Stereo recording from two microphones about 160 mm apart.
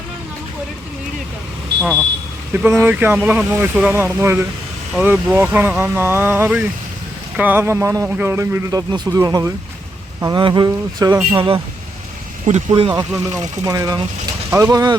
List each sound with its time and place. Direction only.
2.5 s a man's voice: 15° right (ahead or behind)
12.5 s speech: 50° right (ahead or behind)
12.9 s speech: 20° right (ahead or behind)